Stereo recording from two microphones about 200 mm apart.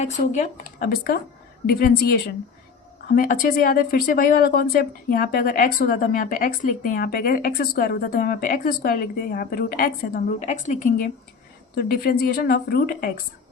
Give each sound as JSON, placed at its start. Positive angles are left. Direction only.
{"t": 0.0, "sound": "speech", "side_deg": 35}
{"t": 11.8, "sound": "speech", "side_deg": 50}